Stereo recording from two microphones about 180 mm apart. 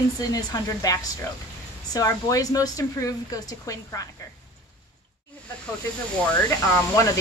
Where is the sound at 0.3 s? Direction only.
20° left (ahead or behind).